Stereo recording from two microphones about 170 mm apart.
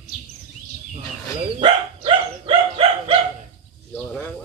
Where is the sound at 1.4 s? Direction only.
30° right (ahead or behind).